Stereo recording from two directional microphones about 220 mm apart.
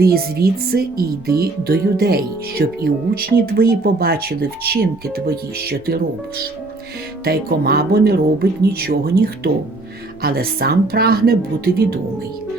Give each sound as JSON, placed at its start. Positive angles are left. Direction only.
{"t": 0.0, "sound": "speech", "side_deg": -45}
{"t": 10.2, "sound": "speech", "side_deg": -45}